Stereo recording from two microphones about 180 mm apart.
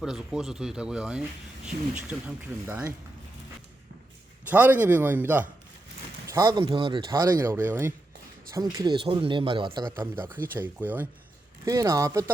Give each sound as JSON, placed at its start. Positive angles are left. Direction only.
{"t": 0.0, "sound": "speech", "side_deg": -5}
{"t": 4.4, "sound": "speech", "side_deg": -10}
{"t": 6.2, "sound": "speech", "side_deg": -20}
{"t": 10.3, "sound": "speech", "side_deg": -10}